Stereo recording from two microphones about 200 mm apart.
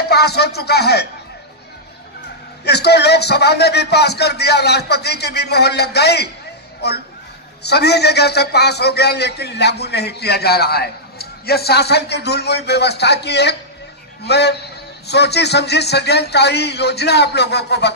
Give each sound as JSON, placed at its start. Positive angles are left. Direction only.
{"t": 0.1, "sound": "music", "side_deg": 55}
{"t": 2.6, "sound": "a man's voice", "side_deg": 55}